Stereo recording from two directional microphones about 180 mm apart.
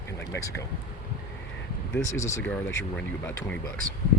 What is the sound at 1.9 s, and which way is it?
Speech, 15° left (ahead or behind).